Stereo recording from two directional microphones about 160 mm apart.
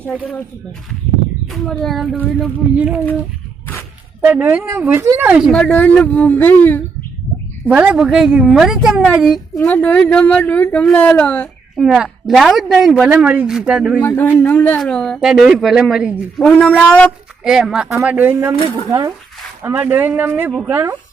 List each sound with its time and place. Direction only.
1.5 s speech: centre (ahead or behind)
4.2 s speech: 10° right (ahead or behind)
5.5 s speech: 5° left (ahead or behind)
7.7 s speech: 10° right (ahead or behind)
9.6 s speech: 10° left (ahead or behind)
11.8 s speech: 5° right (ahead or behind)
14.0 s speech: 15° left (ahead or behind); by 18.5 s 10° right (ahead or behind)
18.9 s speech: 25° right (ahead or behind)
19.6 s speech: 10° right (ahead or behind)